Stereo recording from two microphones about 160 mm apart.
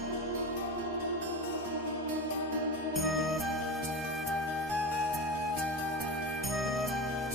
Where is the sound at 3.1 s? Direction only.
Centre (ahead or behind).